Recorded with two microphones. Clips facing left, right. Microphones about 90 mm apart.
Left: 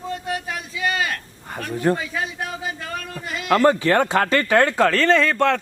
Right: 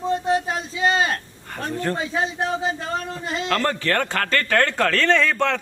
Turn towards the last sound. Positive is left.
turn(degrees=0)  # may be behind; listen again after turning